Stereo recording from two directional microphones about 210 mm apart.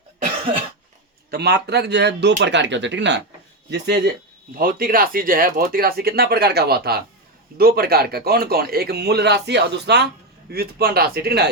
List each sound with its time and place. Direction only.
1.3 s a man's voice: 50° right (ahead or behind)